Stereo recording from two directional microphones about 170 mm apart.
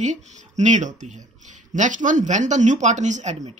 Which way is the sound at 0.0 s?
45° right (ahead or behind).